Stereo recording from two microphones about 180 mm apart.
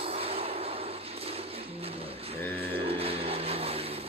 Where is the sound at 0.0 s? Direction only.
35° right (ahead or behind).